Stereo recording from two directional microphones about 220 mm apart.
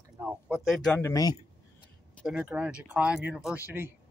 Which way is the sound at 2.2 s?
Centre (ahead or behind).